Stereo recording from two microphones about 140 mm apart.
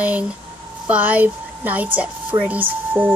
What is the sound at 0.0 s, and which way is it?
Speech, 10° right (ahead or behind).